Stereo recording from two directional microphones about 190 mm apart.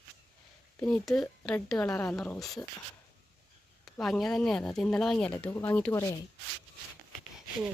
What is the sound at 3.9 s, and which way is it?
Speech, centre (ahead or behind).